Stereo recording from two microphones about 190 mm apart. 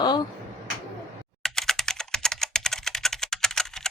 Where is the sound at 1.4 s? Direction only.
Centre (ahead or behind).